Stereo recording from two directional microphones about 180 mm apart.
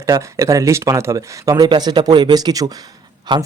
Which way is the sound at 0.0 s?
15° right (ahead or behind).